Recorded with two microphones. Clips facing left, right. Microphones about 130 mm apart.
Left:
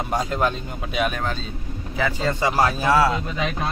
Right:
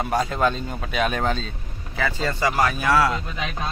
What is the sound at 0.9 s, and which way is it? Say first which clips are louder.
Speech: right 2 dB; 5° left (ahead or behind).